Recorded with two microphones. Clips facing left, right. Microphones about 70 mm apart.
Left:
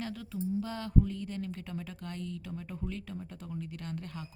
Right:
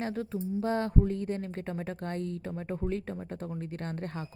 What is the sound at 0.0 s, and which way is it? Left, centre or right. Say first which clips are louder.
A woman's voice: right 4 dB; right.